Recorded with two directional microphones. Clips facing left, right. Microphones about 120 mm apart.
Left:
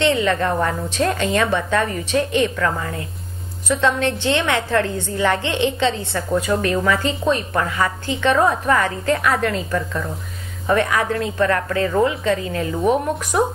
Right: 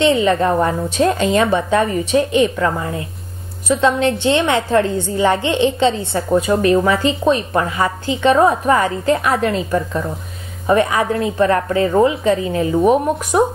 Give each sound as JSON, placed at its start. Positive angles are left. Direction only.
{"t": 0.1, "sound": "a woman's voice", "side_deg": -20}